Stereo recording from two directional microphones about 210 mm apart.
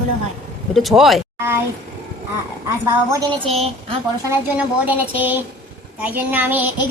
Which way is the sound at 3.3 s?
30° right (ahead or behind).